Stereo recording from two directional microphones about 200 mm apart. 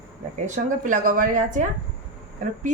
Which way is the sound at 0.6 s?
40° right (ahead or behind).